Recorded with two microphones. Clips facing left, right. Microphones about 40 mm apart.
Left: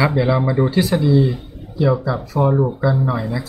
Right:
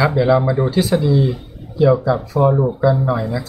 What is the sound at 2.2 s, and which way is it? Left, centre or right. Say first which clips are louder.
Speech: right 2 dB; centre.